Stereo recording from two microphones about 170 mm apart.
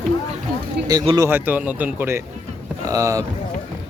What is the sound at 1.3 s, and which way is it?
Speech, 10° right (ahead or behind).